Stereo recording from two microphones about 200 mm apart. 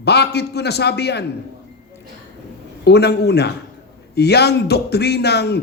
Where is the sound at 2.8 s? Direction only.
55° left (ahead or behind).